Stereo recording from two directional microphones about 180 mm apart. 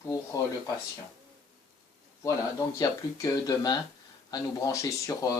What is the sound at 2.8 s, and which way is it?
Speech, 20° left (ahead or behind).